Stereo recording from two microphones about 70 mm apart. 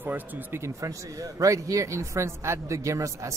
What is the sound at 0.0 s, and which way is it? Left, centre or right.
Speech, right.